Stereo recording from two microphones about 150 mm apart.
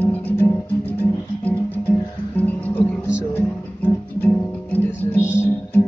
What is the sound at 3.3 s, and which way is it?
Music, 15° left (ahead or behind).